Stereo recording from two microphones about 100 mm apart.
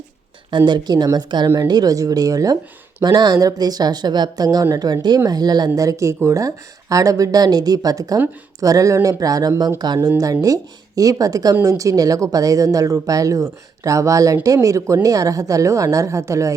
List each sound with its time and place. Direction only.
0.5 s speech: 45° right (ahead or behind); by 16.6 s 30° right (ahead or behind)